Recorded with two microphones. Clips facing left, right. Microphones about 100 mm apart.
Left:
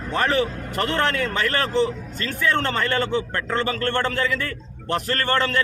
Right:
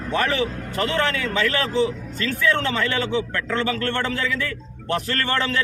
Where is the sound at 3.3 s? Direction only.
35° left (ahead or behind).